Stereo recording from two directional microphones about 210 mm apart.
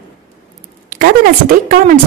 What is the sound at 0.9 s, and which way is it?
A woman's voice, 45° right (ahead or behind).